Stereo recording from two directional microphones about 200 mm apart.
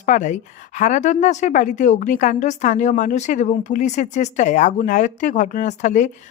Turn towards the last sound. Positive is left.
turn(degrees=40)  # may be behind; listen again after turning